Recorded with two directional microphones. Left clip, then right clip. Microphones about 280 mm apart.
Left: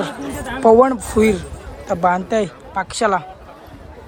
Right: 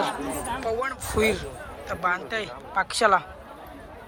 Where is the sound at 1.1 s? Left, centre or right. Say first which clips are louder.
Left 7 dB; centre.